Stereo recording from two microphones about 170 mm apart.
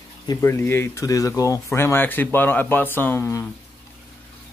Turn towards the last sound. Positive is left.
turn(degrees=15)  # may be behind; listen again after turning